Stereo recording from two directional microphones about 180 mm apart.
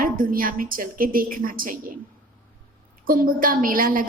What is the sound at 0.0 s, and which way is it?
A woman's voice, 50° right (ahead or behind).